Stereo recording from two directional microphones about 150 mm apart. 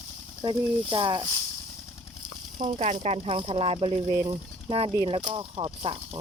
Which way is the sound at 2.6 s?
70° right (ahead or behind).